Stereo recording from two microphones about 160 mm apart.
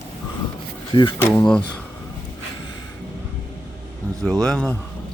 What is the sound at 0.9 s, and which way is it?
Speech, 30° left (ahead or behind).